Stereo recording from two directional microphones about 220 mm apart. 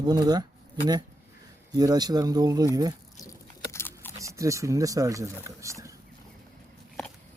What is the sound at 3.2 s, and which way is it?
Biting, 15° left (ahead or behind).